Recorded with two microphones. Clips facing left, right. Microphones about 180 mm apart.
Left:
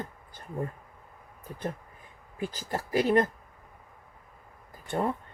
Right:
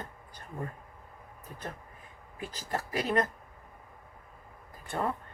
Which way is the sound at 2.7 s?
30° left (ahead or behind).